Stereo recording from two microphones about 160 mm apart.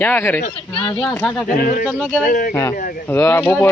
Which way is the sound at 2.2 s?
60° left (ahead or behind).